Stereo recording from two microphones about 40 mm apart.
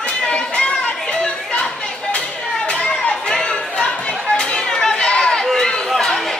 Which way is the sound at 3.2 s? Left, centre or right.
Centre.